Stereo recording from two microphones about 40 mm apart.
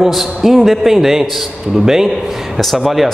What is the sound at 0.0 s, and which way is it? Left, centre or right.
A man's voice, centre.